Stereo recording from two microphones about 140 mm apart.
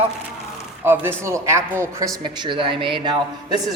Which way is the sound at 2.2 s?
35° right (ahead or behind).